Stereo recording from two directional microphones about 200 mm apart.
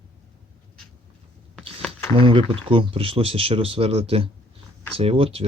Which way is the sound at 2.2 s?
25° right (ahead or behind).